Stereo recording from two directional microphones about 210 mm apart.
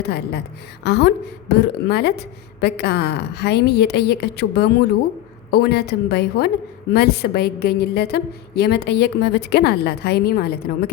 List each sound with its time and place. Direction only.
0.0 s a woman's voice: 50° left (ahead or behind)